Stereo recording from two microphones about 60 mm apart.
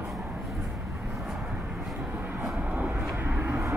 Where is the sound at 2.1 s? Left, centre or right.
Right.